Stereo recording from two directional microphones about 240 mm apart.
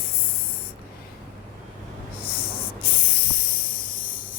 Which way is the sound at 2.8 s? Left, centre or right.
Left.